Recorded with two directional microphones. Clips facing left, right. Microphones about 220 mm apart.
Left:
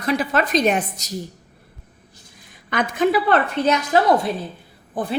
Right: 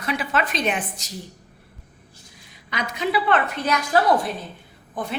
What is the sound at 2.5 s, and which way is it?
Speech, 50° left (ahead or behind).